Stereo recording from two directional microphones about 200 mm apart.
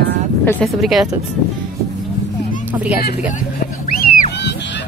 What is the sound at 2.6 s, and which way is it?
Speech, 5° right (ahead or behind).